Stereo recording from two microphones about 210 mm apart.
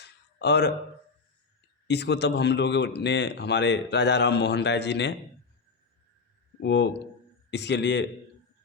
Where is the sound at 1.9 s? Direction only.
55° left (ahead or behind).